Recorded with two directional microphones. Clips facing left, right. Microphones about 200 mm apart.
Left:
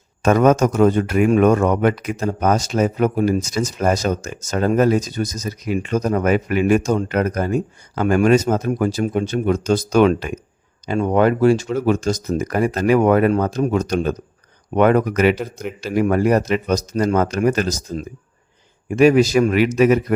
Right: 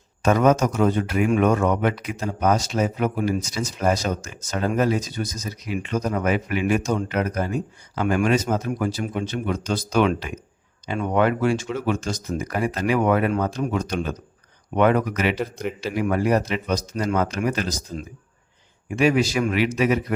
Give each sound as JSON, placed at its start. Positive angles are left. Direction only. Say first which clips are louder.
{"t": 0.2, "sound": "a man's voice", "louder": "left 4 dB", "side_deg": 50}